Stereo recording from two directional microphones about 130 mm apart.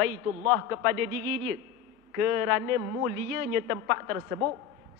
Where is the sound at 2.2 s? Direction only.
20° right (ahead or behind).